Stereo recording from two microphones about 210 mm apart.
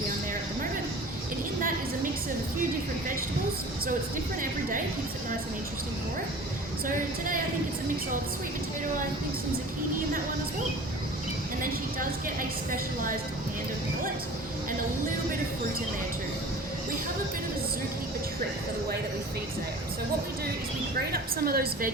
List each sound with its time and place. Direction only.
11.6 s a woman's voice: 40° right (ahead or behind)
21.1 s a woman's voice: 45° right (ahead or behind)